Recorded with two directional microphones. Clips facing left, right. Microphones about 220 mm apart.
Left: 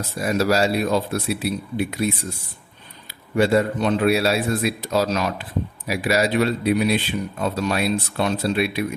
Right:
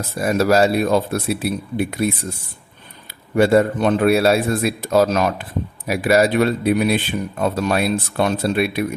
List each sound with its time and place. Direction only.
0.2 s a man's voice: 50° right (ahead or behind)
3.3 s a man's voice: 50° right (ahead or behind)